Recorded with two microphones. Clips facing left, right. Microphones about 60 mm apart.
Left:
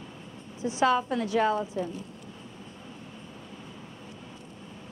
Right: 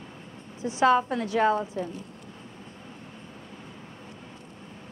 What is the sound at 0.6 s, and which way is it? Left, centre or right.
Speech, right.